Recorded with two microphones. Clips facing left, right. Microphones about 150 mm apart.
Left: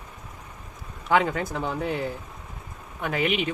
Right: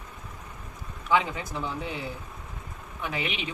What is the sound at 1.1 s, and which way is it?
A man's voice, 55° left (ahead or behind).